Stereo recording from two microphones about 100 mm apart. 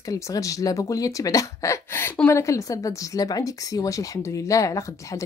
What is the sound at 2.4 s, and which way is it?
Speech, 30° left (ahead or behind).